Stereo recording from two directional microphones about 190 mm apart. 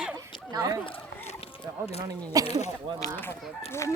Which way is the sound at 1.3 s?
30° left (ahead or behind).